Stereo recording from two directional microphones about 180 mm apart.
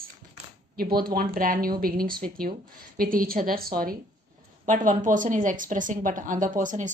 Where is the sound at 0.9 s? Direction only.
55° right (ahead or behind).